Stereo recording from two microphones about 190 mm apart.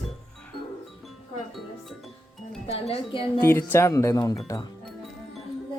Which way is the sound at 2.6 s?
30° left (ahead or behind).